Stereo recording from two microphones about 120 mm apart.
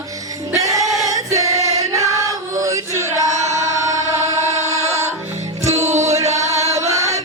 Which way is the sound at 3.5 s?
25° right (ahead or behind).